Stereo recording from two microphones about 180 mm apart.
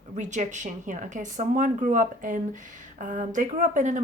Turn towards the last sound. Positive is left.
turn(degrees=-45)  # may be behind; listen again after turning